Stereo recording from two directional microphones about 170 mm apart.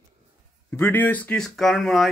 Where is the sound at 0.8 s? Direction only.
10° left (ahead or behind).